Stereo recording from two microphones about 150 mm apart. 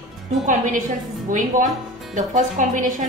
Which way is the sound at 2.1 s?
60° right (ahead or behind).